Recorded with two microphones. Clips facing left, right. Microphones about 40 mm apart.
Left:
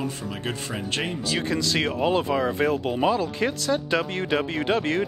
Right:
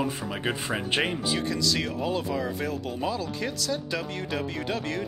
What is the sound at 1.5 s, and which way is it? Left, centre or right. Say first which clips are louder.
Speech: left 3 dB; left.